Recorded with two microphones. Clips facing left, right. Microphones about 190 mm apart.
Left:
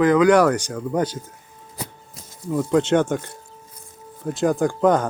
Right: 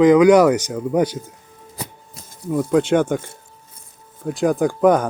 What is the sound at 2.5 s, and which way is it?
Speech, 10° right (ahead or behind).